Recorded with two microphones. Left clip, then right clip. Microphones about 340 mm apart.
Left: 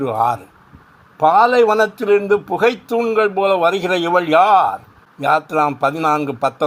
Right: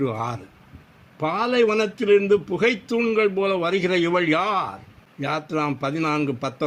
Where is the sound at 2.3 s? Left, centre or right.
Left.